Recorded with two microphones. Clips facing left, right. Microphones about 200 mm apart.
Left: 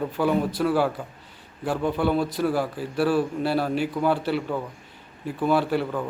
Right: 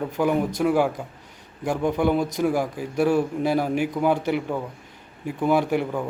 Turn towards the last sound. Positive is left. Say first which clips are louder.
# right 1 dB
turn(degrees=-15)  # may be behind; listen again after turning